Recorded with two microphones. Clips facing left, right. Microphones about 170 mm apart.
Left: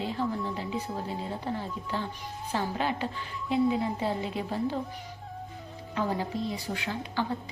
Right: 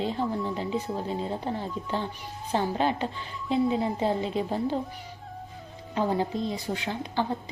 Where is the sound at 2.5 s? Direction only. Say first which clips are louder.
Right 4 dB; 25° right (ahead or behind).